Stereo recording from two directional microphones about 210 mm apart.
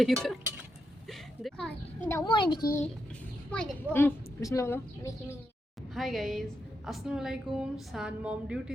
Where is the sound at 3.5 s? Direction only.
5° left (ahead or behind).